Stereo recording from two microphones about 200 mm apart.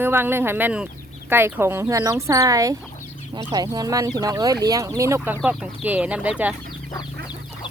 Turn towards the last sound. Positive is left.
turn(degrees=-5)  # may be behind; listen again after turning